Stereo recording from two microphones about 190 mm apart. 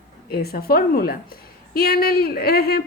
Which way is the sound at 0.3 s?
55° left (ahead or behind).